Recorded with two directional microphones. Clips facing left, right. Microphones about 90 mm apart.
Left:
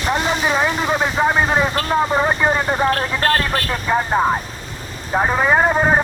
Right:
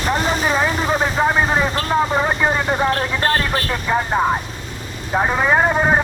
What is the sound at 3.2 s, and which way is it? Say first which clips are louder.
Speech: left 1 dB; 20° right (ahead or behind).